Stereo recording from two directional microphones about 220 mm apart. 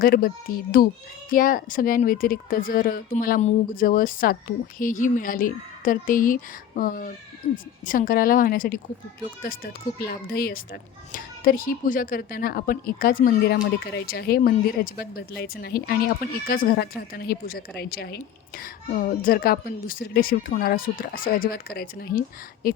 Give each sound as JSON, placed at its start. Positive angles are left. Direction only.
{"t": 0.0, "sound": "speech", "side_deg": 40}
{"t": 10.0, "sound": "speech", "side_deg": 45}